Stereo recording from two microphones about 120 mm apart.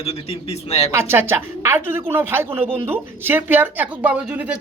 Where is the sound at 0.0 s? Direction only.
55° left (ahead or behind).